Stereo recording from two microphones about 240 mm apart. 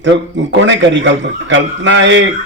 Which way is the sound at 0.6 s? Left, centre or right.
Right.